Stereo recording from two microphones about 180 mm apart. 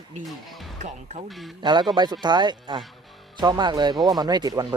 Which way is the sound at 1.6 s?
25° right (ahead or behind).